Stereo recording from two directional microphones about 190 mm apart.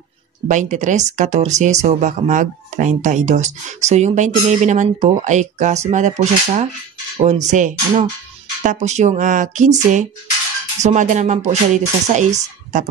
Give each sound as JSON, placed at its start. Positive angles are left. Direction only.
{"t": 0.5, "sound": "speech", "side_deg": -40}